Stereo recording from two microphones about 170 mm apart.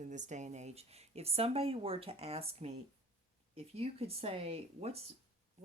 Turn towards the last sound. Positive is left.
turn(degrees=-35)  # may be behind; listen again after turning